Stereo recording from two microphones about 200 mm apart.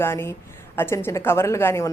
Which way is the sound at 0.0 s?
10° left (ahead or behind).